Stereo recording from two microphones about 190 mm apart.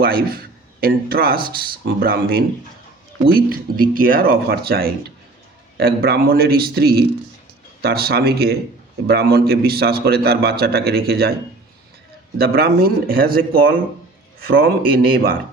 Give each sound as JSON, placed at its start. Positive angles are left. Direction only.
{"t": 0.8, "sound": "a man's voice", "side_deg": -50}
{"t": 12.4, "sound": "speech", "side_deg": -55}